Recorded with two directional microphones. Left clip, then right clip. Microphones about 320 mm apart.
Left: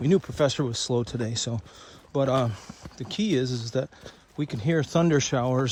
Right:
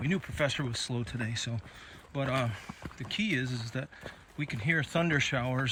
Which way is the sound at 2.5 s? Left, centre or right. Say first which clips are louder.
Even; centre.